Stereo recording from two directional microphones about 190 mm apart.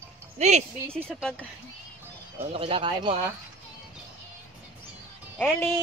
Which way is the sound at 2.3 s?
30° right (ahead or behind).